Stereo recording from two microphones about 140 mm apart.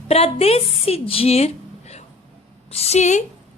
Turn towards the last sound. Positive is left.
turn(degrees=55)  # may be behind; listen again after turning